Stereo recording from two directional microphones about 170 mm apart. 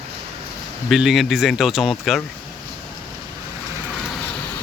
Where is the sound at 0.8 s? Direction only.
Centre (ahead or behind).